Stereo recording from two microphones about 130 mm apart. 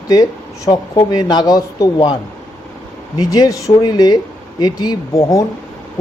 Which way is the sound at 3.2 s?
30° left (ahead or behind).